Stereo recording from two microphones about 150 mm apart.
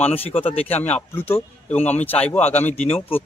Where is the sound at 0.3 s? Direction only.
40° left (ahead or behind).